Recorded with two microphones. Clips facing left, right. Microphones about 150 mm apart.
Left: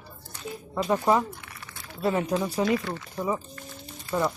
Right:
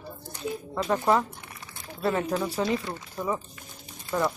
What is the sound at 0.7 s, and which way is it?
Speech, 10° left (ahead or behind).